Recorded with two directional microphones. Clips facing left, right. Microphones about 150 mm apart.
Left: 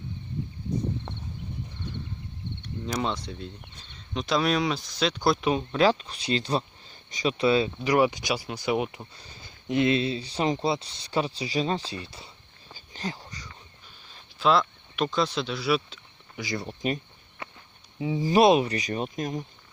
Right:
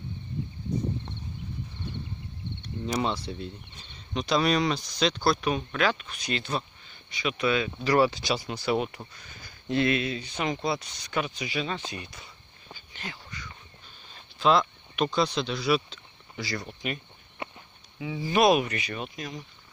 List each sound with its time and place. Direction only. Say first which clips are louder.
2.9 s speech: right 1 dB; 5° right (ahead or behind)
5.2 s speech: left 2 dB; 20° left (ahead or behind)
7.8 s speech: even; 15° left (ahead or behind)
9.1 s speech: left 1 dB; 30° left (ahead or behind)
12.7 s a sound: left 7 dB; 35° left (ahead or behind)
14.4 s speech: even; centre (ahead or behind)
16.3 s speech: left 2 dB; 15° left (ahead or behind)
16.6 s speech: left 5 dB; 35° left (ahead or behind)
17.4 s a sound: right 3 dB; 25° right (ahead or behind)
17.9 s speech: left 4 dB; 35° left (ahead or behind)